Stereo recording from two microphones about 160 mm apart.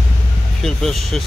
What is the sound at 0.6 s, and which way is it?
Speech, centre (ahead or behind).